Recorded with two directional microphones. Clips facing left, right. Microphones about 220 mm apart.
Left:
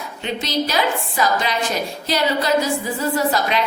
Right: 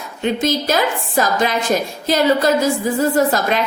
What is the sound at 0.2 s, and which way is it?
A woman's voice, 50° right (ahead or behind).